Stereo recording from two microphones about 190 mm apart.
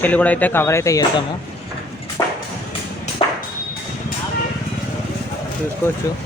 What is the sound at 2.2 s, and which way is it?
Music, 20° left (ahead or behind).